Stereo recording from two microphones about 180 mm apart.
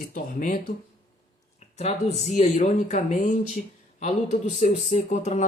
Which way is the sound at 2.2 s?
35° left (ahead or behind).